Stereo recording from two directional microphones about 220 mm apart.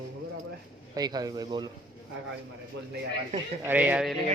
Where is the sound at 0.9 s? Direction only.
15° right (ahead or behind).